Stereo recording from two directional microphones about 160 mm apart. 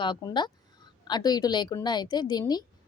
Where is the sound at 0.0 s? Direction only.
30° left (ahead or behind).